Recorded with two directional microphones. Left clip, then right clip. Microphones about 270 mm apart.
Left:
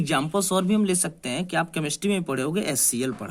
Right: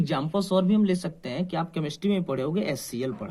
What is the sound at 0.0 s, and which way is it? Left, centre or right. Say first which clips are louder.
A man's voice: left 3 dB; left.